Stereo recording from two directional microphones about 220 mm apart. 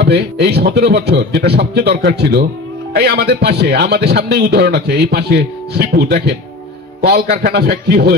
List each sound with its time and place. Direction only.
0.0 s speech: 50° right (ahead or behind)